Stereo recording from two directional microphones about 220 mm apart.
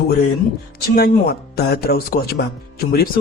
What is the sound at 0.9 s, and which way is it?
Speech, 45° left (ahead or behind).